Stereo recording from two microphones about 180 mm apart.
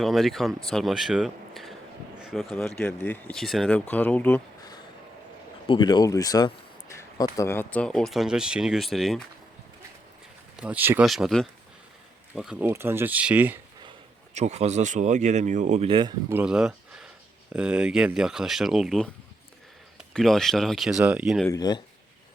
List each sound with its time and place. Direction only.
0.0 s speech: centre (ahead or behind)
5.6 s speech: 25° left (ahead or behind); by 9.2 s centre (ahead or behind)
10.6 s speech: 10° right (ahead or behind)
14.3 s speech: 40° right (ahead or behind)
16.3 s speech: 5° right (ahead or behind)
20.1 s speech: centre (ahead or behind)
21.4 s speech: 20° left (ahead or behind)